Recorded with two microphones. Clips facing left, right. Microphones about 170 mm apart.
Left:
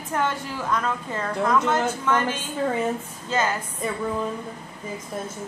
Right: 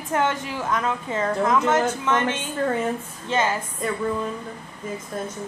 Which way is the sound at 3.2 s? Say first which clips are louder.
Right 1 dB; 25° right (ahead or behind).